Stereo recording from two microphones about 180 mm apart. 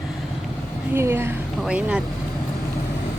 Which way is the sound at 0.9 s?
15° right (ahead or behind).